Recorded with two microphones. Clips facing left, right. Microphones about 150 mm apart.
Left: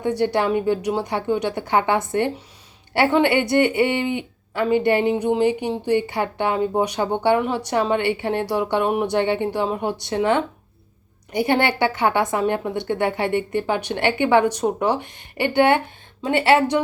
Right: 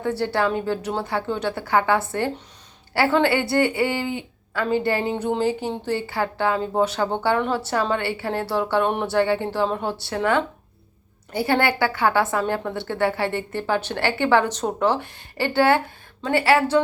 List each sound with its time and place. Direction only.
0.0 s a woman's voice: 15° left (ahead or behind)
9.1 s a woman's voice: 20° left (ahead or behind)